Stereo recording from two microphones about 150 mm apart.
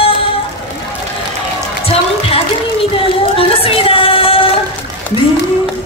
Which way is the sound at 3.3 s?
40° left (ahead or behind).